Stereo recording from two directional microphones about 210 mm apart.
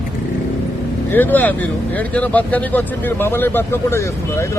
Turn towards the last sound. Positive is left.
turn(degrees=15)  # may be behind; listen again after turning